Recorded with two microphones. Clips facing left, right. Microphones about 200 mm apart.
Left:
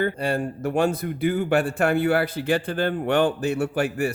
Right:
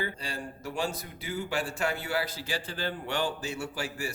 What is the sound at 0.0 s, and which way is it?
Speech, 60° left (ahead or behind).